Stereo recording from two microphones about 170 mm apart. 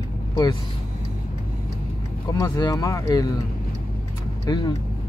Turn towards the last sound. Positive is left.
turn(degrees=25)  # may be behind; listen again after turning